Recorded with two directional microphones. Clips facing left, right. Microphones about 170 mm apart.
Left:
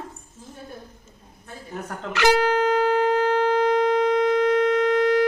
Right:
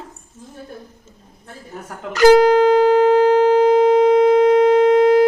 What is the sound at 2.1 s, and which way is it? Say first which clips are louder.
Guitar: right 9 dB; 40° right (ahead or behind).